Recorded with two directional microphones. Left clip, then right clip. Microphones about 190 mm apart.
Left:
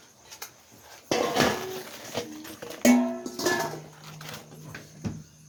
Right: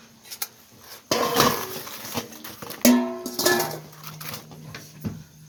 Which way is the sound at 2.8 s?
65° right (ahead or behind).